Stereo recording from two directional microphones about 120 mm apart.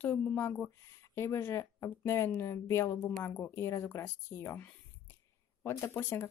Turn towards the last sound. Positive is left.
turn(degrees=20)  # may be behind; listen again after turning